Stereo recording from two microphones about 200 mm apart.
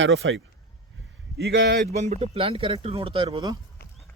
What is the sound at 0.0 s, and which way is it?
Speech, 70° right (ahead or behind).